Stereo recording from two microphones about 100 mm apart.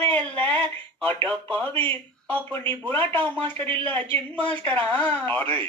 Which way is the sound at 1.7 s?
60° right (ahead or behind).